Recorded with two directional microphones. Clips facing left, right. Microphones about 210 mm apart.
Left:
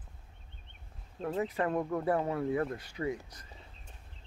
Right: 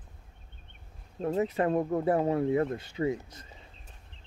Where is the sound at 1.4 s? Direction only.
25° right (ahead or behind).